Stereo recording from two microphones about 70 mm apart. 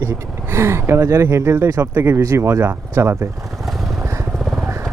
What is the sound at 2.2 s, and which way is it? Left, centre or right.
Speech, right.